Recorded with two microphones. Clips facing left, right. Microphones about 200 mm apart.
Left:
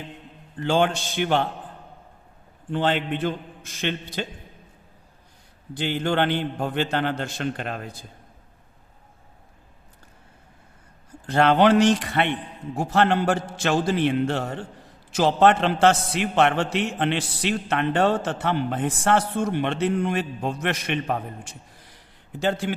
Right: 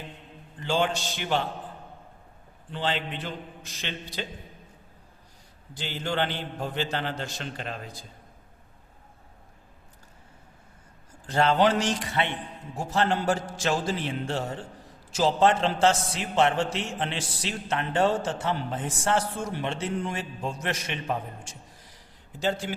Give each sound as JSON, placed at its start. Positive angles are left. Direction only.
{"t": 0.6, "sound": "a man's voice", "side_deg": 55}
{"t": 2.6, "sound": "a man's voice", "side_deg": 55}
{"t": 5.7, "sound": "a man's voice", "side_deg": 60}
{"t": 11.3, "sound": "a man's voice", "side_deg": 65}